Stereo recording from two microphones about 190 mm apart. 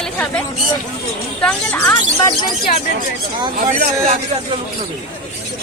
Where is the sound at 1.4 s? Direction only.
10° left (ahead or behind).